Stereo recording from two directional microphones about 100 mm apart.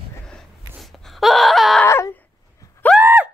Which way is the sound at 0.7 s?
Centre (ahead or behind).